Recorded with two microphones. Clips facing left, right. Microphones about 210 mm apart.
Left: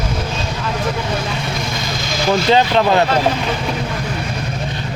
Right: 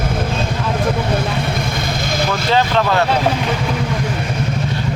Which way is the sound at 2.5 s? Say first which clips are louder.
Left 1 dB; 20° left (ahead or behind).